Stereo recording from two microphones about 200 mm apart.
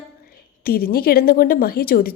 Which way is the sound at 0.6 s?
50° left (ahead or behind).